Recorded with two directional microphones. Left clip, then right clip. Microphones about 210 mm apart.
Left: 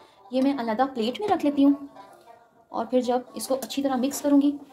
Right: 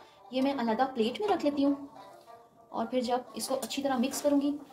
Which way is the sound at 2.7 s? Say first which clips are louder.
Left 6 dB; 45° left (ahead or behind).